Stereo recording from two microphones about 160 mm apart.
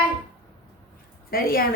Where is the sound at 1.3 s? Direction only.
65° left (ahead or behind).